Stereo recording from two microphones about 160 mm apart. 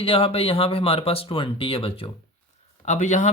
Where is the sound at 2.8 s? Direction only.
50° left (ahead or behind).